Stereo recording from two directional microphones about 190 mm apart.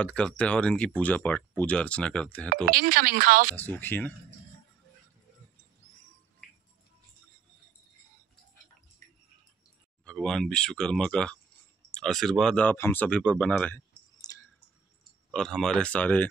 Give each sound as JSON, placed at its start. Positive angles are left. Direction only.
{"t": 0.0, "sound": "speech", "side_deg": 5}
{"t": 2.5, "sound": "speech", "side_deg": -50}
{"t": 3.5, "sound": "speech", "side_deg": 10}
{"t": 10.0, "sound": "speech", "side_deg": 0}
{"t": 14.1, "sound": "a sound", "side_deg": 20}
{"t": 15.3, "sound": "speech", "side_deg": 0}